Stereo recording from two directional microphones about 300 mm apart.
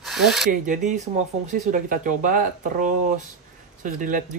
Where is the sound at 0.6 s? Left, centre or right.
Right.